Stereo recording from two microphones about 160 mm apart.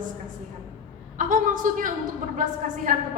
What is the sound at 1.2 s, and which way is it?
A woman's voice, 55° right (ahead or behind).